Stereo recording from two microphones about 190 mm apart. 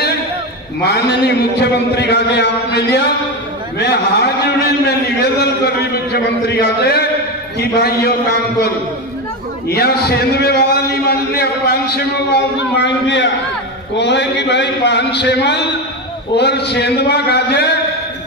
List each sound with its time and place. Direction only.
0.8 s a man's voice: 60° left (ahead or behind)
6.5 s a man's voice: 60° left (ahead or behind)